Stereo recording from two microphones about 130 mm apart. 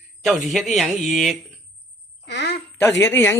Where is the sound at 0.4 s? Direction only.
Centre (ahead or behind).